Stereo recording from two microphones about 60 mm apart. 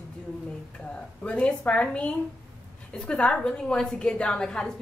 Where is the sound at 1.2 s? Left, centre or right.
Centre.